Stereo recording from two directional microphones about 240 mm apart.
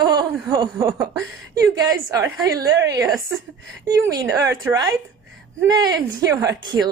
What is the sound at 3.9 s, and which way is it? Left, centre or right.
Speech, centre.